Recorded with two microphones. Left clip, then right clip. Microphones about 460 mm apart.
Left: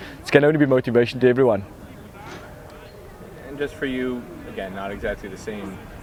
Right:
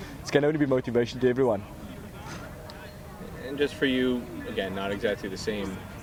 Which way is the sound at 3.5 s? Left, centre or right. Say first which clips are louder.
Even; centre.